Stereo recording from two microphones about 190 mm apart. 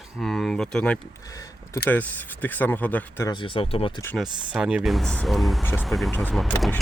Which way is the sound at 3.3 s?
25° left (ahead or behind).